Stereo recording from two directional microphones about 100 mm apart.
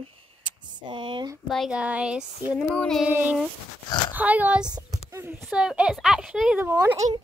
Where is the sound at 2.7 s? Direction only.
10° left (ahead or behind).